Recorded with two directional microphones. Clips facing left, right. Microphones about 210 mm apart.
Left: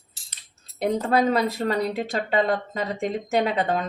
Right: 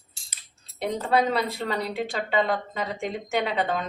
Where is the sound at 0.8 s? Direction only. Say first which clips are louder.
Left 3 dB; 45° left (ahead or behind).